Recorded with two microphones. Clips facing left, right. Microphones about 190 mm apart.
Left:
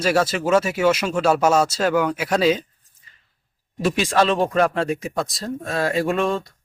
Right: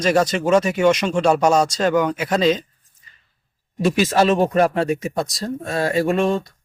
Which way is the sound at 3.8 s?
Centre (ahead or behind).